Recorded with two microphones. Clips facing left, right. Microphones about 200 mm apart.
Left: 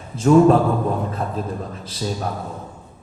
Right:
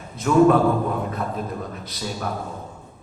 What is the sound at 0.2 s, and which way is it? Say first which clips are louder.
A man's voice: left 3 dB; 30° left (ahead or behind).